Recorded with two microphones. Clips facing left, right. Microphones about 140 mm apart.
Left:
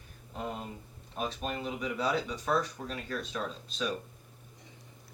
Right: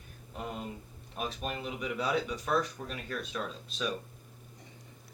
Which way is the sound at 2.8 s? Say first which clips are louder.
Left 1 dB; 10° left (ahead or behind).